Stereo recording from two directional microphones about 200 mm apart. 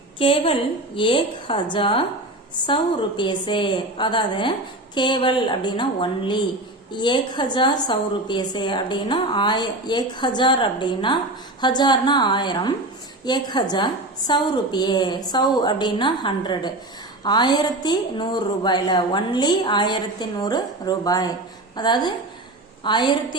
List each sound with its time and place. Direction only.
0.2 s a woman's voice: 25° left (ahead or behind)